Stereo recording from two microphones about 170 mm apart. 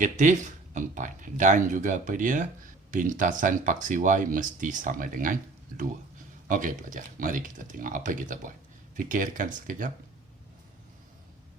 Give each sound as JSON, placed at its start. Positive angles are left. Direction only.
{"t": 0.0, "sound": "speech", "side_deg": -45}